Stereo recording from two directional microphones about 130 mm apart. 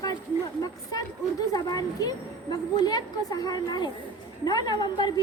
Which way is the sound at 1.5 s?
30° left (ahead or behind).